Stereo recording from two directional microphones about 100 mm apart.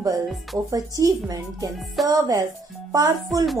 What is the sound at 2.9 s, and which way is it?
Speech, 40° right (ahead or behind).